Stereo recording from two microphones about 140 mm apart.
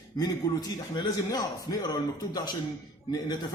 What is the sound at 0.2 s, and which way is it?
A man's voice, 25° left (ahead or behind).